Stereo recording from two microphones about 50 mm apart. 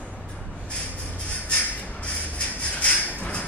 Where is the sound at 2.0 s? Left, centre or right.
Left.